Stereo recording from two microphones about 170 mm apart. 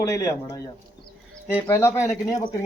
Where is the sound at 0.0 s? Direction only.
20° left (ahead or behind).